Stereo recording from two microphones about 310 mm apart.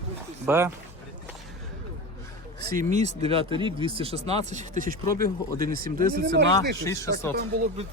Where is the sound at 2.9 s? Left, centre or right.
Right.